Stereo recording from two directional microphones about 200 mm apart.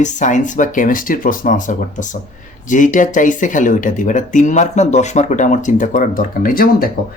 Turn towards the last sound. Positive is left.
turn(degrees=45)  # may be behind; listen again after turning